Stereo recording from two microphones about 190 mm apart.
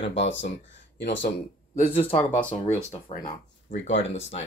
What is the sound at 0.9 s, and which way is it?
Speech, 65° left (ahead or behind).